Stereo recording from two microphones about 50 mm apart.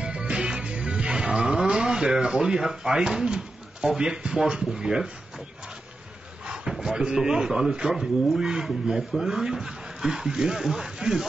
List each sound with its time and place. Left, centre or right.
0.0 s music: centre
1.6 s speech: centre
6.4 s a sound: centre
6.7 s speech: centre